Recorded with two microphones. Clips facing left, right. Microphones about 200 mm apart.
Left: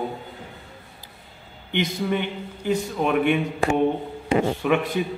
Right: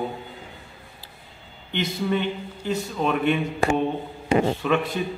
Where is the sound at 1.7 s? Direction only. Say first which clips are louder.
Left 1 dB; 15° left (ahead or behind).